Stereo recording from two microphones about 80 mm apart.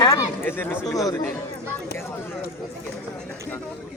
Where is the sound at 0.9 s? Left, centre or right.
Left.